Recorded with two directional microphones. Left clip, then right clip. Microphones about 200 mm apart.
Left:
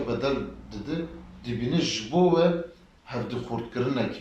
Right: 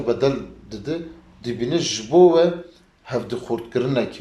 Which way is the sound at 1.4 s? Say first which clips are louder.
Right 6 dB; 45° right (ahead or behind).